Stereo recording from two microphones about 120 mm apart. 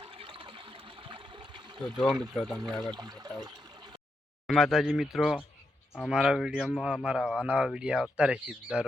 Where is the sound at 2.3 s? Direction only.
Centre (ahead or behind).